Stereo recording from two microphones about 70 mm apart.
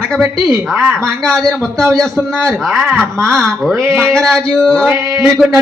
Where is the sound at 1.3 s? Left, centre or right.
Centre.